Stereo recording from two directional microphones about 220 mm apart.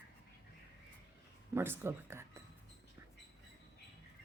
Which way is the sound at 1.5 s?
10° right (ahead or behind).